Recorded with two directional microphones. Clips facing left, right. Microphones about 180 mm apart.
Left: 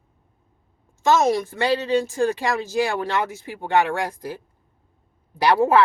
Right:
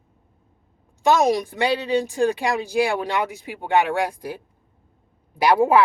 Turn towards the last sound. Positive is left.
turn(degrees=-10)  # may be behind; listen again after turning